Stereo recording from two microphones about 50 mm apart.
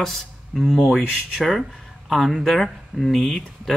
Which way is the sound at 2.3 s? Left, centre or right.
Centre.